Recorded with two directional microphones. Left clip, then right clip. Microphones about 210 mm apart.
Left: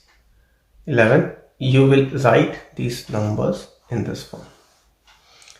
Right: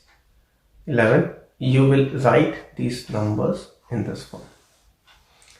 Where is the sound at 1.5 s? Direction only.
35° left (ahead or behind).